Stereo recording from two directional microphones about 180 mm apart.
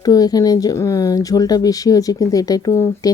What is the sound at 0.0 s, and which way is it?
Speech, 20° left (ahead or behind).